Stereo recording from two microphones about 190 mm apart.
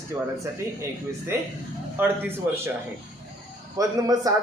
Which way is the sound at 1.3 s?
10° right (ahead or behind).